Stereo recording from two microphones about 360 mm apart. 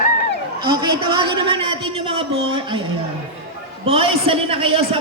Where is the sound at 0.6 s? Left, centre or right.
Centre.